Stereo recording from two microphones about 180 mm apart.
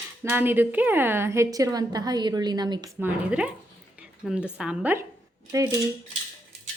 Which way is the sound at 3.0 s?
5° right (ahead or behind).